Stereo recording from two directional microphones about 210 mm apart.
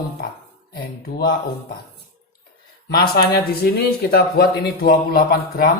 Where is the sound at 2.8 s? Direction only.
50° left (ahead or behind).